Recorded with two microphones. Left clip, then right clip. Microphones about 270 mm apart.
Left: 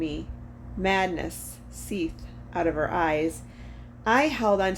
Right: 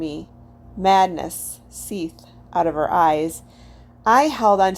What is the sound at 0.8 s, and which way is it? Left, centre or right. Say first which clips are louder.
A woman's voice: right 9 dB; centre.